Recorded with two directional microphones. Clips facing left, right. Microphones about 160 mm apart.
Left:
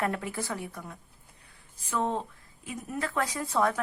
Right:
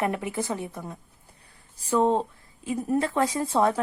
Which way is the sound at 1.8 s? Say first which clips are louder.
Right 8 dB; 35° right (ahead or behind).